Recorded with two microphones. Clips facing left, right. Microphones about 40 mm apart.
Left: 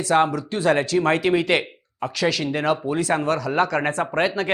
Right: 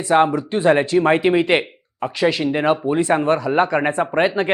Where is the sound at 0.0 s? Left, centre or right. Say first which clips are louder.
Right 3 dB; right.